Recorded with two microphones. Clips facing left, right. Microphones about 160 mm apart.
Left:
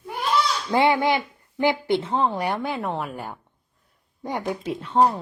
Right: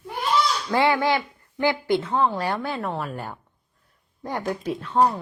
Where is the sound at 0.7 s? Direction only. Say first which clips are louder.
Left 1 dB; 20° left (ahead or behind).